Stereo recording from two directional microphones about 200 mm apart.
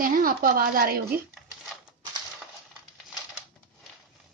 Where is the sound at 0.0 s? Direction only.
45° right (ahead or behind).